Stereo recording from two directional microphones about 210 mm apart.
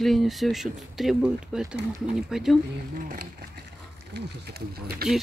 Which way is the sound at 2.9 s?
40° right (ahead or behind).